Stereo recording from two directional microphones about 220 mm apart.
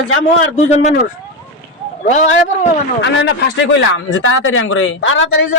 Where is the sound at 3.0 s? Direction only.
55° left (ahead or behind).